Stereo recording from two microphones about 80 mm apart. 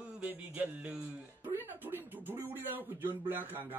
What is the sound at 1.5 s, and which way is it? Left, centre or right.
Speech, right.